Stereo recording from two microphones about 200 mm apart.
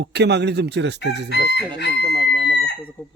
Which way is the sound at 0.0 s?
55° right (ahead or behind).